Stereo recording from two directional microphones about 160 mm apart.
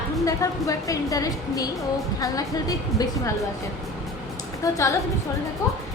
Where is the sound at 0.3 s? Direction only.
20° left (ahead or behind).